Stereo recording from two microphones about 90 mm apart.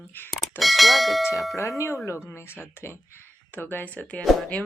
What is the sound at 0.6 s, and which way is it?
Speech, centre (ahead or behind).